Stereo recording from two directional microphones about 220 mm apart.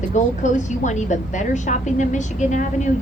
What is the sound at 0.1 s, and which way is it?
A woman's voice, 35° left (ahead or behind).